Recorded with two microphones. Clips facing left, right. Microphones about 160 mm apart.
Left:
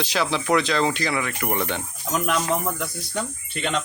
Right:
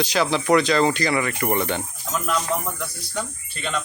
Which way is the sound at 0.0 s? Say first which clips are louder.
Right 3 dB; centre (ahead or behind).